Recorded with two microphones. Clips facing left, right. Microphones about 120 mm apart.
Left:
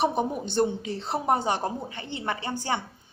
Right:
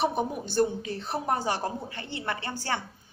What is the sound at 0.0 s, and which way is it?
A woman's voice, 20° left (ahead or behind).